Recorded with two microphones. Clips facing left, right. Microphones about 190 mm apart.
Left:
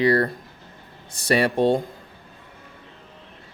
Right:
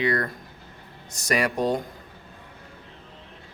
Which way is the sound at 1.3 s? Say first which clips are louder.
Left 5 dB; 30° left (ahead or behind).